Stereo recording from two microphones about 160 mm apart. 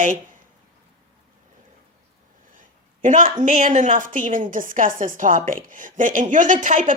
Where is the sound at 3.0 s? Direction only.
55° right (ahead or behind).